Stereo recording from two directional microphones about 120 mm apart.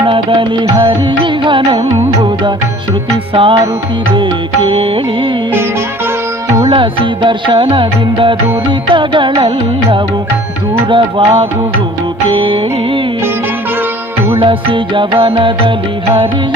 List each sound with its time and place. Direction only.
0.1 s music: 45° right (ahead or behind)
3.3 s music: 50° right (ahead or behind)
6.7 s music: 45° right (ahead or behind)
10.8 s music: 45° right (ahead or behind)
14.3 s music: 45° right (ahead or behind)